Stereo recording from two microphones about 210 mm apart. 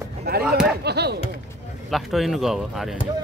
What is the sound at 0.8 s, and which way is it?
Speech, 50° right (ahead or behind).